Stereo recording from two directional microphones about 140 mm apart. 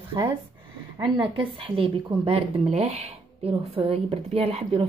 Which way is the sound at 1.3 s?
40° right (ahead or behind).